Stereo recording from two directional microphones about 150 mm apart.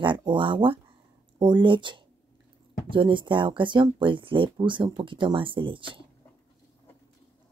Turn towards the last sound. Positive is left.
turn(degrees=-35)  # may be behind; listen again after turning